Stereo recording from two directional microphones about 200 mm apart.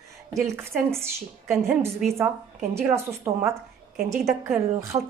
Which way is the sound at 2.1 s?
15° right (ahead or behind).